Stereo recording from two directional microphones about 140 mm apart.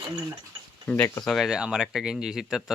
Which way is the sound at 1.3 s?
Centre (ahead or behind).